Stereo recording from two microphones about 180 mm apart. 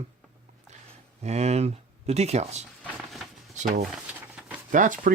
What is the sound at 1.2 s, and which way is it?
Speech, 35° right (ahead or behind).